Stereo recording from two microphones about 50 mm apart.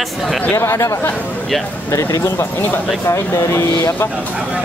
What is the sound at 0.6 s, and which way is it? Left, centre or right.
Speech, left.